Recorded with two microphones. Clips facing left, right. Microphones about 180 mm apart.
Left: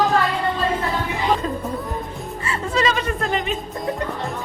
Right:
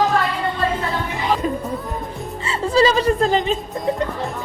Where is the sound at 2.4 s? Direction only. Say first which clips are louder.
Right 5 dB; 30° right (ahead or behind).